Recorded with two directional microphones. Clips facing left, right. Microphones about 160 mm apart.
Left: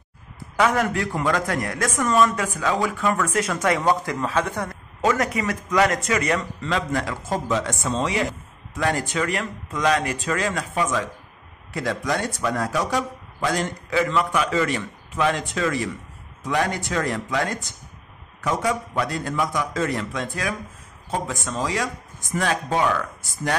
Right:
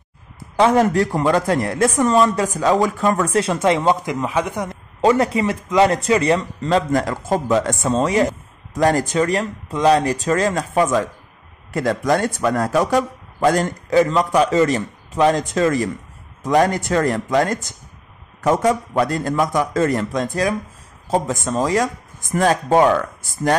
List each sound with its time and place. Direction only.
0.6 s speech: 30° right (ahead or behind)
5.0 s a man's voice: 30° right (ahead or behind)